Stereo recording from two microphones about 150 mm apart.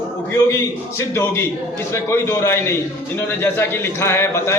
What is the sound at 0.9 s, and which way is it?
A man's voice, 15° left (ahead or behind).